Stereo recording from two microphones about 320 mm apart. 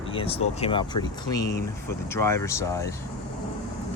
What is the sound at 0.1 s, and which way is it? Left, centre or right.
Speech, centre.